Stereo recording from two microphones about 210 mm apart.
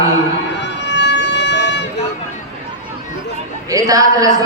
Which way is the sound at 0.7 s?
55° left (ahead or behind).